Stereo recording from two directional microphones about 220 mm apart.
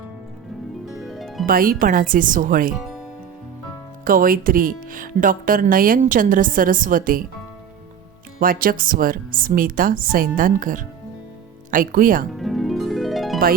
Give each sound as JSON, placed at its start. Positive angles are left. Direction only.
{"t": 0.9, "sound": "harp", "side_deg": 0}
{"t": 1.5, "sound": "speech", "side_deg": -40}
{"t": 4.0, "sound": "speech", "side_deg": -40}
{"t": 8.4, "sound": "speech", "side_deg": -40}
{"t": 12.3, "sound": "harp", "side_deg": 0}